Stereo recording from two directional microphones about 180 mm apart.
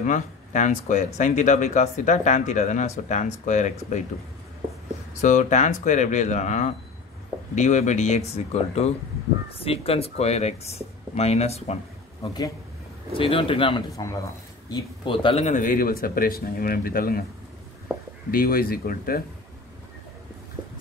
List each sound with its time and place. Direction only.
0.0 s speech: 45° left (ahead or behind)
5.2 s speech: 45° left (ahead or behind)
12.2 s speech: 20° left (ahead or behind); by 17.2 s 55° left (ahead or behind)
18.3 s speech: 55° left (ahead or behind)